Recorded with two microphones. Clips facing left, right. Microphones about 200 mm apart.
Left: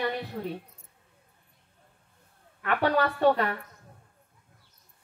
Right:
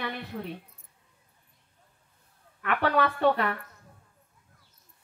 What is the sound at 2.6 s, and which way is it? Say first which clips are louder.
Speech: left 1 dB; 35° left (ahead or behind).